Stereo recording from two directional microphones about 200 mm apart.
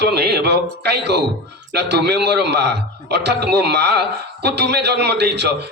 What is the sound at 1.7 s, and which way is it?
A man's voice, 55° right (ahead or behind).